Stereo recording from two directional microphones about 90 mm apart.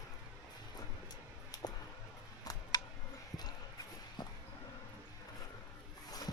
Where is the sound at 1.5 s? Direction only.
50° left (ahead or behind).